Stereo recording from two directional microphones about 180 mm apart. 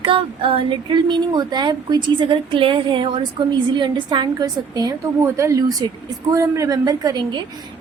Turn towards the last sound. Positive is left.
turn(degrees=-20)  # may be behind; listen again after turning